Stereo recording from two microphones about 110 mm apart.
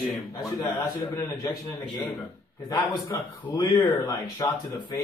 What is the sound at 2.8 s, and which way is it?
Speech, 20° left (ahead or behind).